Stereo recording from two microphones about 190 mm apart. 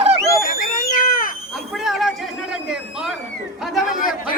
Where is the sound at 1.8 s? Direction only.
Centre (ahead or behind).